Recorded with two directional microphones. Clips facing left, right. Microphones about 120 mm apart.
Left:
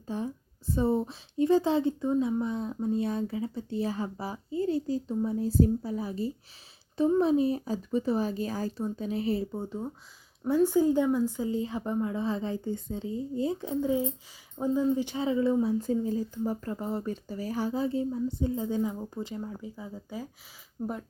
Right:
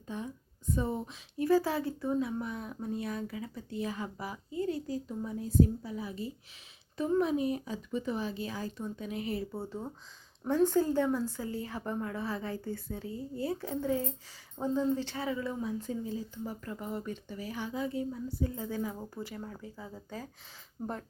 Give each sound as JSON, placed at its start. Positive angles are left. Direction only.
{"t": 0.1, "sound": "speech", "side_deg": 35}
{"t": 9.5, "sound": "speech", "side_deg": 15}